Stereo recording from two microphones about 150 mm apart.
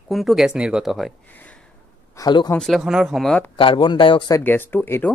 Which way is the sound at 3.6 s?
35° left (ahead or behind).